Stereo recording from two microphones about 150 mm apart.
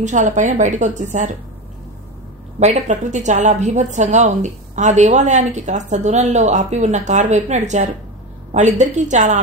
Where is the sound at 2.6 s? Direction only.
50° right (ahead or behind).